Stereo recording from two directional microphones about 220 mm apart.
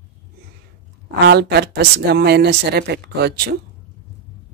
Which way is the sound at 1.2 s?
45° right (ahead or behind).